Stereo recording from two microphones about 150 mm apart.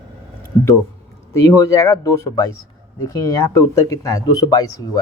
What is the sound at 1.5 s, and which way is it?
Speech, 20° left (ahead or behind).